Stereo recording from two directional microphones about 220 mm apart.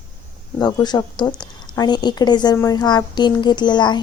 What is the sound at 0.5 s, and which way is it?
A woman's voice, 20° left (ahead or behind).